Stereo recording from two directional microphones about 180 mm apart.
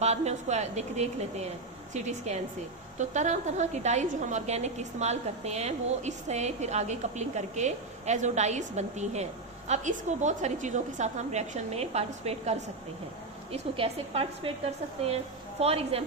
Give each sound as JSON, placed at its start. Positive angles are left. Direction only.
{"t": 0.0, "sound": "a woman's voice", "side_deg": -35}